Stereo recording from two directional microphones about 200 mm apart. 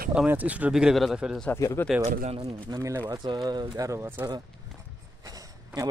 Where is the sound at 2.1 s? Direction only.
30° right (ahead or behind).